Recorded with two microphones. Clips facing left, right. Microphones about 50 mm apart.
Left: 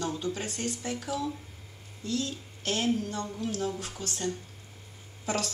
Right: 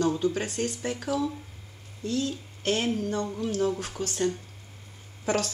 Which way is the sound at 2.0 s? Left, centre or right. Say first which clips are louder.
Right 3 dB; right.